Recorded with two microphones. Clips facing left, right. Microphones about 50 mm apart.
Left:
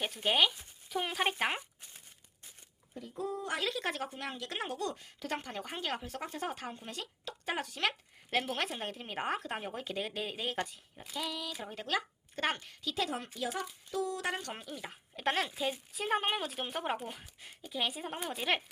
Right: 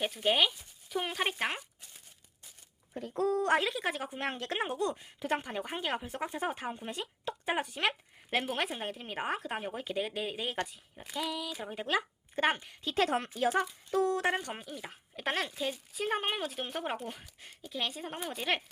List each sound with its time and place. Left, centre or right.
0.0 s speech: centre
3.1 s speech: right
3.6 s speech: centre
4.2 s speech: right; by 12.7 s centre
12.8 s speech: right
14.3 s speech: right
14.5 s speech: centre